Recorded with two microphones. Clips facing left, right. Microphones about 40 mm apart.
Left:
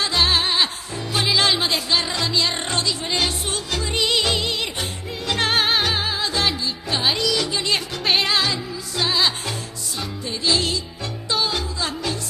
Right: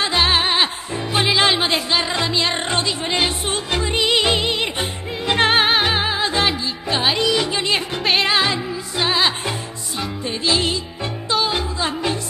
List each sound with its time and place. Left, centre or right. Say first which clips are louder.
0.0 s music: right 2 dB; right
8.0 s music: right 1 dB; centre
8.3 s music: right 3 dB; right
11.4 s music: right 3 dB; right